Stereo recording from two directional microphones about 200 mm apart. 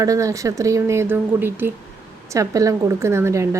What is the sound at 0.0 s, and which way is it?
A woman's voice, 15° right (ahead or behind).